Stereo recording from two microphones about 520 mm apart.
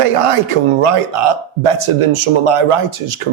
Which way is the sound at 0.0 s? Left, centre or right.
Right.